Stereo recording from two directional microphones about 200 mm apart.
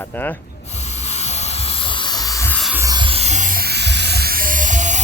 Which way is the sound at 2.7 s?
15° right (ahead or behind).